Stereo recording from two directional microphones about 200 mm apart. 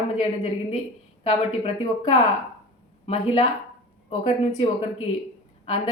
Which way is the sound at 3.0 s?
30° left (ahead or behind).